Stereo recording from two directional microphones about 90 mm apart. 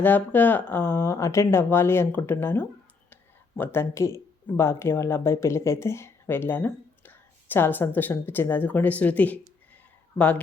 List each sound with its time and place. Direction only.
0.0 s speech: 20° left (ahead or behind)
0.9 s speech: 35° left (ahead or behind); by 10.4 s 15° left (ahead or behind)